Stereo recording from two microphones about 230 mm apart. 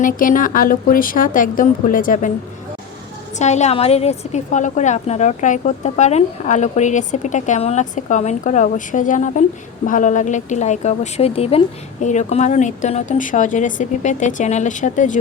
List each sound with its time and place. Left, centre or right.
0.0 s a woman's voice: left
3.3 s a woman's voice: left